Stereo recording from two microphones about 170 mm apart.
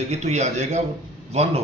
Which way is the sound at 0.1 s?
40° right (ahead or behind).